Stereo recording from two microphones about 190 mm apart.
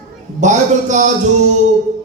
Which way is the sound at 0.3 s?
40° right (ahead or behind).